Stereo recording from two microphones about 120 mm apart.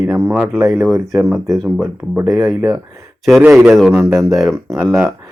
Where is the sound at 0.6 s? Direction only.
5° right (ahead or behind).